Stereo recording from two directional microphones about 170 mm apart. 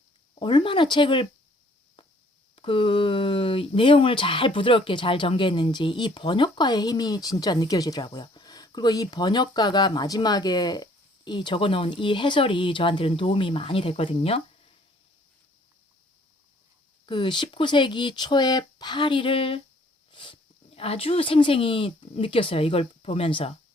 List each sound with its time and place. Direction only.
0.3 s speech: 30° left (ahead or behind)
2.6 s speech: 30° left (ahead or behind)
17.1 s speech: 30° left (ahead or behind)